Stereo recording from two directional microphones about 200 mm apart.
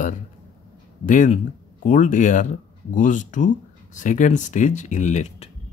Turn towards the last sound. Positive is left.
turn(degrees=35)  # may be behind; listen again after turning